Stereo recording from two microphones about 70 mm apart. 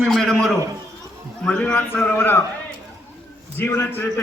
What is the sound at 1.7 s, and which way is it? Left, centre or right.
Speech, left.